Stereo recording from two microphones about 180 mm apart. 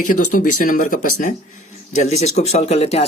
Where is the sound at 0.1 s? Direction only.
45° left (ahead or behind).